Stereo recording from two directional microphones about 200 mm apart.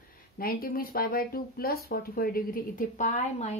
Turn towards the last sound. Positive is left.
turn(degrees=35)  # may be behind; listen again after turning